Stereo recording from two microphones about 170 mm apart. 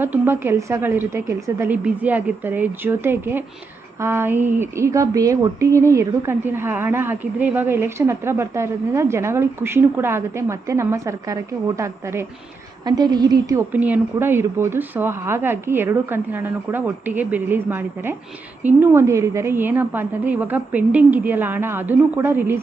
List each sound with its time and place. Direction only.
0.0 s speech: 15° right (ahead or behind)
12.8 s a woman's voice: 25° right (ahead or behind)
13.7 s speech: 10° right (ahead or behind)